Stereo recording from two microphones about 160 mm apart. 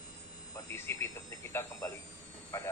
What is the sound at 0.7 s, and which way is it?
Speech, 15° left (ahead or behind).